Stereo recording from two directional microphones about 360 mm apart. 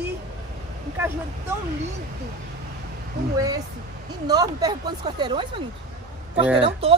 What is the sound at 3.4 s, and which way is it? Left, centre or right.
Speech, centre.